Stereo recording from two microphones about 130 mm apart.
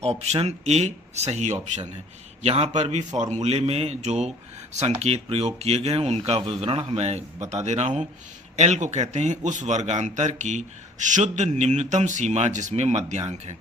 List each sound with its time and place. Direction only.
0.0 s a man's voice: 55° right (ahead or behind)
3.3 s a man's voice: 55° right (ahead or behind)